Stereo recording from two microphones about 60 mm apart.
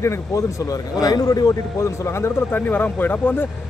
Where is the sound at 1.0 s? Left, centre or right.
Left.